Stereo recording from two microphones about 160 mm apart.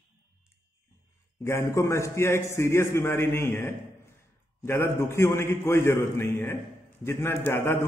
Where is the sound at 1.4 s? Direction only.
15° left (ahead or behind).